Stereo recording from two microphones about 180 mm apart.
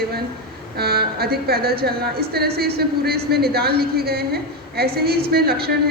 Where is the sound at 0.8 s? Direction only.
60° right (ahead or behind).